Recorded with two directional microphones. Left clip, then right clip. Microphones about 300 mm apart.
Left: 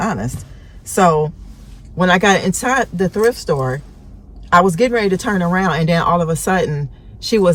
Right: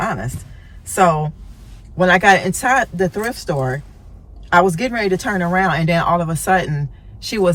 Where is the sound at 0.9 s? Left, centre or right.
Centre.